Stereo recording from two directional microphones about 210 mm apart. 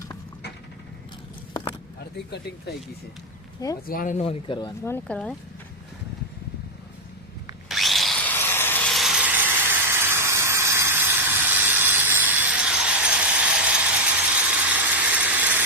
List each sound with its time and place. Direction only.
1.5 s a sound: 20° left (ahead or behind)
2.1 s speech: 50° left (ahead or behind)
3.8 s speech: 40° left (ahead or behind); by 4.7 s 25° left (ahead or behind)
4.9 s speech: 10° left (ahead or behind)
7.7 s wood: centre (ahead or behind)